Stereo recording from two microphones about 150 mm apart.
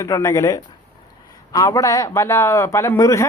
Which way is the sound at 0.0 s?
20° left (ahead or behind).